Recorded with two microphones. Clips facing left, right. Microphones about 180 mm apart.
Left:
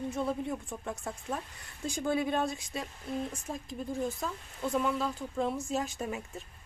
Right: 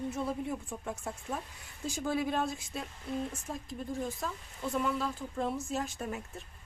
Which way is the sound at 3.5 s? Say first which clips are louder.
Left 1 dB; 15° left (ahead or behind).